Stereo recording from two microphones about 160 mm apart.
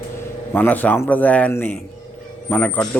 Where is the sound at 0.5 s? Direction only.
10° left (ahead or behind).